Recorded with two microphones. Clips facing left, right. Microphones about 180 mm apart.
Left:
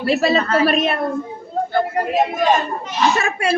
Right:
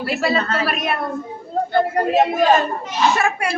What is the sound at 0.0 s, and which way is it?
Speech, 25° left (ahead or behind).